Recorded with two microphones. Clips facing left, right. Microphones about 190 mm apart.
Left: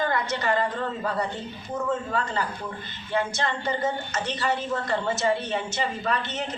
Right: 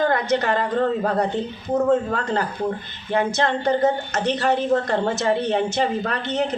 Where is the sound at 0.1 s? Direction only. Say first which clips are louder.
Right 5 dB; 60° right (ahead or behind).